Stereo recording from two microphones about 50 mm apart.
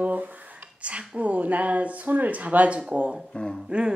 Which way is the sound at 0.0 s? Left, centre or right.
Right.